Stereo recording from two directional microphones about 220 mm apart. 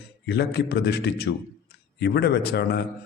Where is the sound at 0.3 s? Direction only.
50° left (ahead or behind).